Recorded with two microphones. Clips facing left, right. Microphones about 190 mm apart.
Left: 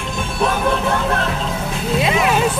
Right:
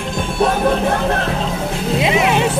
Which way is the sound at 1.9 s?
20° right (ahead or behind).